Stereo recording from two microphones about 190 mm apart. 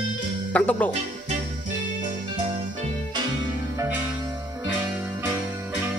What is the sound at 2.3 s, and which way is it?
Music, 25° right (ahead or behind).